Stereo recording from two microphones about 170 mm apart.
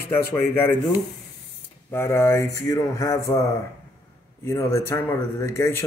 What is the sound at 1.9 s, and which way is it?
Mantra, 15° left (ahead or behind).